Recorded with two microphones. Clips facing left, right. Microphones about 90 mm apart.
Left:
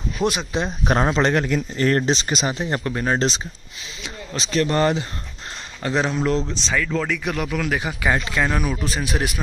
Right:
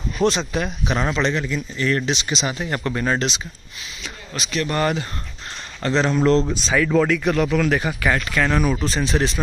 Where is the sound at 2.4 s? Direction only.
25° left (ahead or behind).